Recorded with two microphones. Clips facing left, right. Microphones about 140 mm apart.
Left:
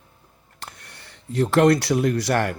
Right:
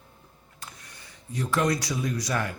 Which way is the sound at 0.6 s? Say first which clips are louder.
Left 5 dB; 65° left (ahead or behind).